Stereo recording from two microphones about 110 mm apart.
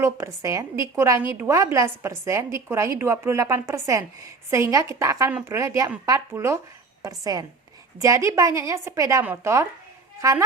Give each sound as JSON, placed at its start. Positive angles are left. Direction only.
{"t": 0.0, "sound": "a woman's voice", "side_deg": -30}